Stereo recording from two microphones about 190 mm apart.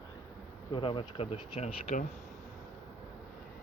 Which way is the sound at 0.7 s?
25° left (ahead or behind).